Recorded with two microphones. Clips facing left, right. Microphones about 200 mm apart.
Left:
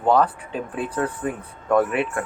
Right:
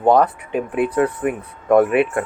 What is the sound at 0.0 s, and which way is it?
Speech, 20° right (ahead or behind).